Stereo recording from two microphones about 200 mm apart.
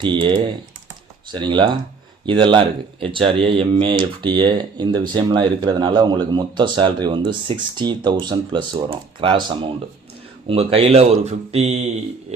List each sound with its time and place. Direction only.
0.0 s speech: 25° right (ahead or behind)